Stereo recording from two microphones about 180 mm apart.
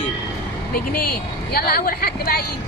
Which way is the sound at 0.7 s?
55° left (ahead or behind).